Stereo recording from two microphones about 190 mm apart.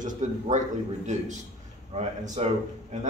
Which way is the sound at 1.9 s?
35° right (ahead or behind).